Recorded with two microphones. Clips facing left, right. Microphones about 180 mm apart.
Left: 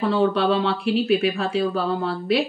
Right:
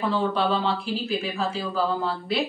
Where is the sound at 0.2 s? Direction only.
65° left (ahead or behind).